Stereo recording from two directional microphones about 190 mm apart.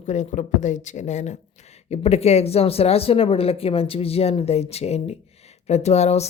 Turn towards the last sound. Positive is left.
turn(degrees=35)  # may be behind; listen again after turning